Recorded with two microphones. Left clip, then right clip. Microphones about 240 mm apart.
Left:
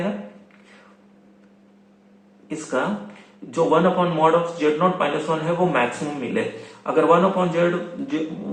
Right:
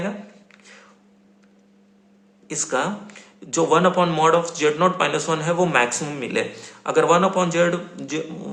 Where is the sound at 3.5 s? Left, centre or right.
Right.